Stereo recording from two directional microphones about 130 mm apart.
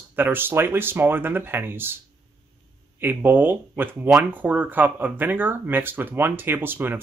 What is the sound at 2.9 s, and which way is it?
Speech, 15° right (ahead or behind).